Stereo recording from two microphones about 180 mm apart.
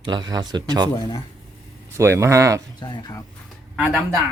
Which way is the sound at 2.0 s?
15° right (ahead or behind).